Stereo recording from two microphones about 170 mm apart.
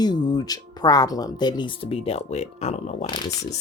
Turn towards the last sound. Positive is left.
turn(degrees=25)  # may be behind; listen again after turning